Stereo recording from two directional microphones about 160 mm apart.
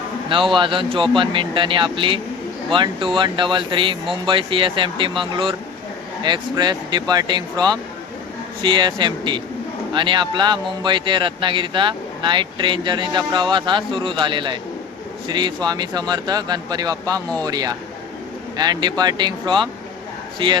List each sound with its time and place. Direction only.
0.5 s speech: 30° right (ahead or behind)